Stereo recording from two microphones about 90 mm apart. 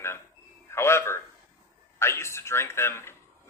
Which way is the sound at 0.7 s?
30° left (ahead or behind).